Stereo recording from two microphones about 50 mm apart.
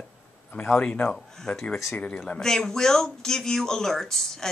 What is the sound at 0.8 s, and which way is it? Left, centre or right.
Speech, left.